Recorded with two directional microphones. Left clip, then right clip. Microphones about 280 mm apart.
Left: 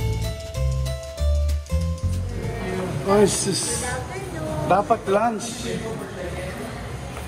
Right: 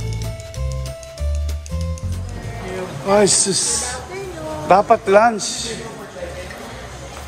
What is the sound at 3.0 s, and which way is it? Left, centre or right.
A man's voice, centre.